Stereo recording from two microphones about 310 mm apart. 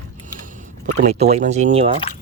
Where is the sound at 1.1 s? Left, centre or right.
Right.